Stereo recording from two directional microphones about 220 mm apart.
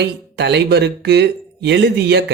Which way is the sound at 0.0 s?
50° right (ahead or behind).